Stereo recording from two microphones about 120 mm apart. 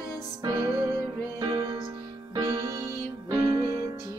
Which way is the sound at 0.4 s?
30° right (ahead or behind).